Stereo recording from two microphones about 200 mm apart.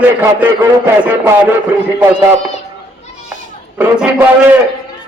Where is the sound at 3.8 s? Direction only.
5° right (ahead or behind).